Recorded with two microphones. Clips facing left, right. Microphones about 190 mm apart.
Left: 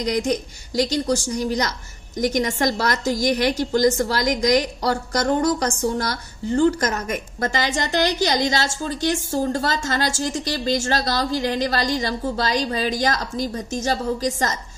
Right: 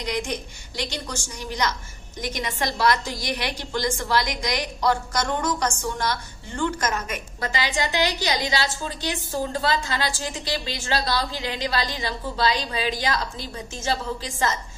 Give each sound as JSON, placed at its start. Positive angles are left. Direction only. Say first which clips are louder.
{"t": 0.0, "sound": "a woman's voice", "louder": "left 6 dB", "side_deg": 40}